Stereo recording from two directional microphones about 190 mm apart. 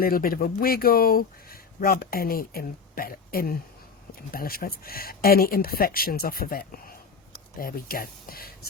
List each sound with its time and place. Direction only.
0.0 s speech: 50° left (ahead or behind)